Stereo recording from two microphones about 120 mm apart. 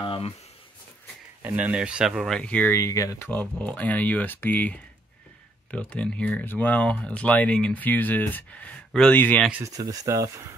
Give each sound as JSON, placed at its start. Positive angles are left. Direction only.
{"t": 0.0, "sound": "a sound", "side_deg": 50}
{"t": 1.4, "sound": "speech", "side_deg": -10}
{"t": 2.7, "sound": "speech", "side_deg": 25}
{"t": 3.3, "sound": "speech", "side_deg": 10}
{"t": 9.7, "sound": "speech", "side_deg": -30}